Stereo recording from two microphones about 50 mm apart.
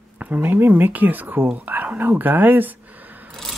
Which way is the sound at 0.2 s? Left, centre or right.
Right.